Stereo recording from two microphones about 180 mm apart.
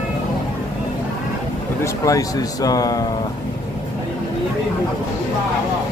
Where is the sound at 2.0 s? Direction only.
20° left (ahead or behind).